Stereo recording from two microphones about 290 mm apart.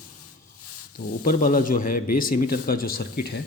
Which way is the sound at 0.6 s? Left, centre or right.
Left.